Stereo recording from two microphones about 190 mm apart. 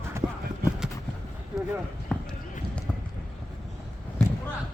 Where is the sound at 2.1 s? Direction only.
5° left (ahead or behind).